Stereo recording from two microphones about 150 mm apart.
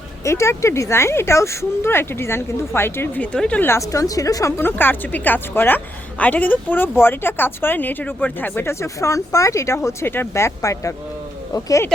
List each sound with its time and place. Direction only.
0.3 s speech: 20° left (ahead or behind)